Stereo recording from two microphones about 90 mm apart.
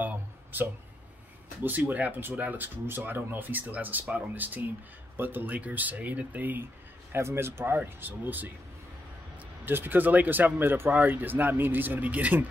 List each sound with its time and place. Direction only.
0.0 s a sound: 20° right (ahead or behind)
1.6 s speech: 20° right (ahead or behind)
9.7 s speech: 25° right (ahead or behind)